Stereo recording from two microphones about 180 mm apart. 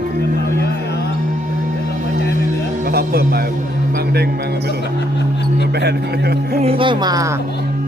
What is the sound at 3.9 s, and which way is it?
Music, 60° right (ahead or behind).